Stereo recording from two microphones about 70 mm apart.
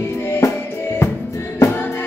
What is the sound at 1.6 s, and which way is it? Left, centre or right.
Music, left.